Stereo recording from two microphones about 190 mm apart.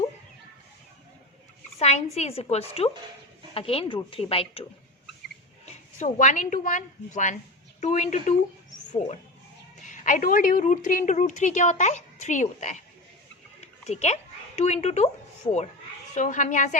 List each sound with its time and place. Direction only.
1.8 s a sound: 35° left (ahead or behind)
2.1 s a woman's voice: 35° left (ahead or behind)
5.6 s a woman's voice: 40° left (ahead or behind)
9.8 s a woman's voice: 40° left (ahead or behind)
13.6 s a sound: 35° left (ahead or behind)
16.1 s a woman's voice: 40° left (ahead or behind)